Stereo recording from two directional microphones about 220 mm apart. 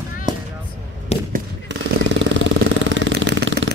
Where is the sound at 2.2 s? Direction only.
55° right (ahead or behind).